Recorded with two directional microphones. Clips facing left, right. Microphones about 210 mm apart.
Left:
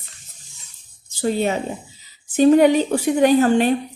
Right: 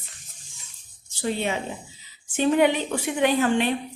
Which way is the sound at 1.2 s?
40° left (ahead or behind).